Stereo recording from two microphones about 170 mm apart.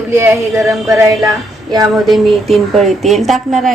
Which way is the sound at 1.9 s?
Centre (ahead or behind).